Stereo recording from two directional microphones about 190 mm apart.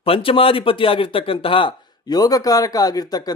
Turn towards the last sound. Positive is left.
turn(degrees=20)  # may be behind; listen again after turning